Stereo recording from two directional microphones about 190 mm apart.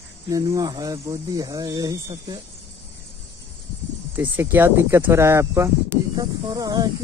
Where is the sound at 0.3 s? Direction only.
20° right (ahead or behind).